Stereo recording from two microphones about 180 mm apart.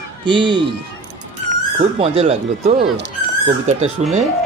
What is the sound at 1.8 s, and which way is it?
Speech, 35° right (ahead or behind).